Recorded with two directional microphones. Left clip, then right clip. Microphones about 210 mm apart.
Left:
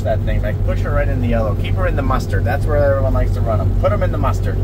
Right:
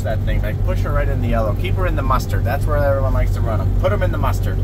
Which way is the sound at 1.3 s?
10° right (ahead or behind).